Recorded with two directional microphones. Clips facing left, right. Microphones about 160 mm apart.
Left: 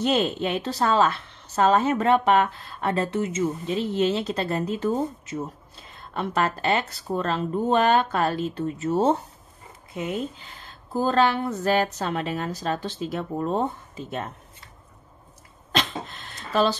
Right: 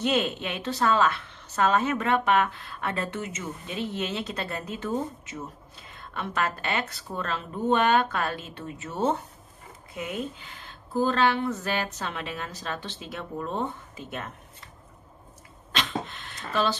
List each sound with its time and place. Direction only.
0.0 s a woman's voice: 35° left (ahead or behind)
10.9 s a woman's voice: 40° left (ahead or behind)
15.7 s a sound: 40° left (ahead or behind)